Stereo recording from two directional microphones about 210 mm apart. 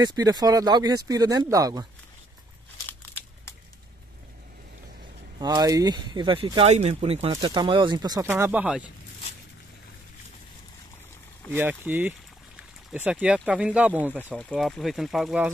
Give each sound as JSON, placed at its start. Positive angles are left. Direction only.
{"t": 0.0, "sound": "speech", "side_deg": -15}
{"t": 2.9, "sound": "crumpling", "side_deg": 10}
{"t": 5.4, "sound": "speech", "side_deg": -20}
{"t": 11.5, "sound": "speech", "side_deg": -10}
{"t": 14.1, "sound": "speech", "side_deg": 5}